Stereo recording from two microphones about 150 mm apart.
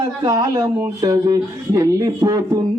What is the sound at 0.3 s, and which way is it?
Speech, 25° right (ahead or behind).